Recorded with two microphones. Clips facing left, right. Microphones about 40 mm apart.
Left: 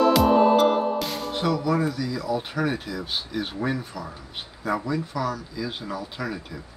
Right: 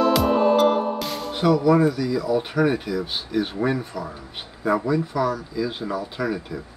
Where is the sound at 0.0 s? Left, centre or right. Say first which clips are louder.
Left 1 dB; centre.